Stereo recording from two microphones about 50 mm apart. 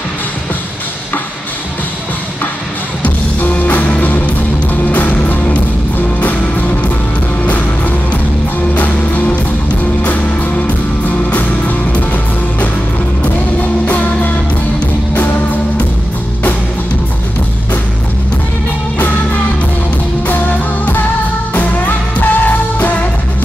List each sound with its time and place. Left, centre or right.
3.0 s music: left
8.7 s music: left
13.8 s music: left
20.2 s music: left